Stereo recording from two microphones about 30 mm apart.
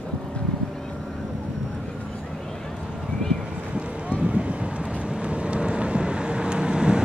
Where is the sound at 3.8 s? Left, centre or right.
Right.